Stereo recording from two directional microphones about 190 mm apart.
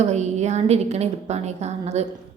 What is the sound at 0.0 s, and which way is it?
A woman's voice, 35° right (ahead or behind).